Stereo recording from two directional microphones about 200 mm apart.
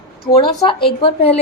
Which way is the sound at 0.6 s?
25° left (ahead or behind).